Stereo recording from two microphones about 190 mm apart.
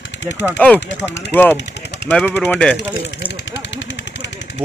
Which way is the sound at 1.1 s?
65° left (ahead or behind).